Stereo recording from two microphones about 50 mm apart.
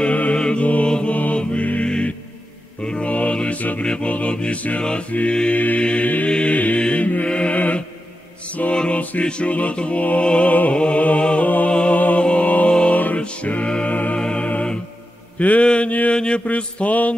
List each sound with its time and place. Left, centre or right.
0.0 s music: left
0.4 s mantra: left
1.9 s music: left
2.8 s mantra: left
3.8 s music: left
5.6 s music: left
6.2 s chant: left
6.8 s mantra: left
8.7 s music: left
10.5 s music: left
11.7 s music: centre
15.3 s mantra: left
15.9 s music: left
16.2 s music: left